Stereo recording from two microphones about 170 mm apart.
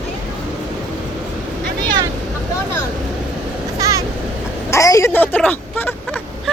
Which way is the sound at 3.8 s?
20° right (ahead or behind).